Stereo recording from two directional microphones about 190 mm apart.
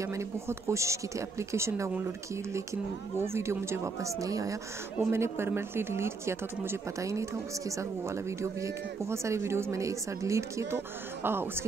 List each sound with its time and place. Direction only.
0.0 s speech: 15° right (ahead or behind)
8.4 s speech: 15° right (ahead or behind)